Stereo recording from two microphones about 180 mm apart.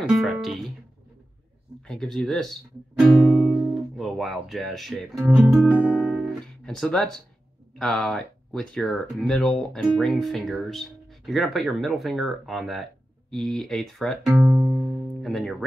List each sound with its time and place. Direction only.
0.0 s speech: centre (ahead or behind)
1.9 s speech: centre (ahead or behind)
14.2 s music: 5° right (ahead or behind)